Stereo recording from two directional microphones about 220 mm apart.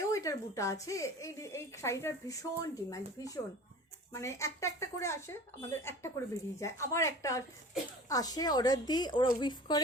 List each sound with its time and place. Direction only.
0.0 s speech: 15° left (ahead or behind)